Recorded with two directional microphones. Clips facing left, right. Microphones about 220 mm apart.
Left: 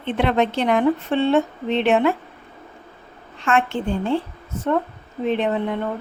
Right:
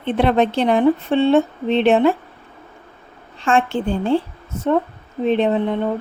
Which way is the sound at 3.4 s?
30° right (ahead or behind).